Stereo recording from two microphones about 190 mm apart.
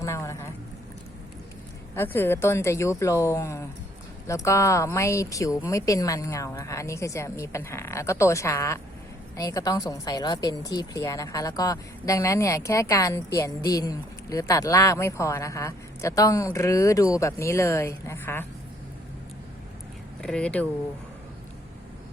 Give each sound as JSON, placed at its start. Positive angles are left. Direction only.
{"t": 0.0, "sound": "a sound", "side_deg": 15}
{"t": 2.0, "sound": "speech", "side_deg": 10}
{"t": 20.2, "sound": "speech", "side_deg": 5}